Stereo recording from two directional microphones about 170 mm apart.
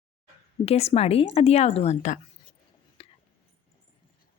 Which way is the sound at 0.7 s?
35° left (ahead or behind).